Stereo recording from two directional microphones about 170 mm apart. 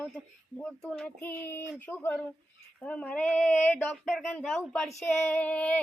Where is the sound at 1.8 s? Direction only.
10° left (ahead or behind).